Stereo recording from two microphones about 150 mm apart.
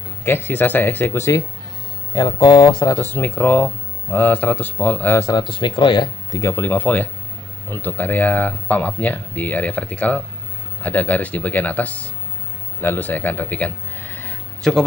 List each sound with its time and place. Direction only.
0.2 s speech: 15° left (ahead or behind)
2.1 s speech: 30° left (ahead or behind)
3.0 s speech: 15° left (ahead or behind); by 6.4 s 30° left (ahead or behind)
6.4 s speech: 15° left (ahead or behind)